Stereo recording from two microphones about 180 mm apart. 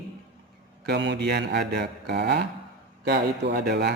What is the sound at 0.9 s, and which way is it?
Speech, 75° right (ahead or behind).